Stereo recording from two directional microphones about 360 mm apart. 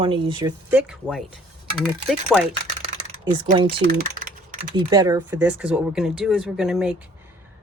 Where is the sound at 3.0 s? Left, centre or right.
Centre.